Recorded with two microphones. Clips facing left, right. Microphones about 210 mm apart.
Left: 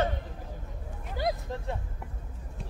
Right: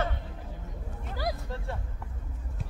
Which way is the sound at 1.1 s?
20° left (ahead or behind).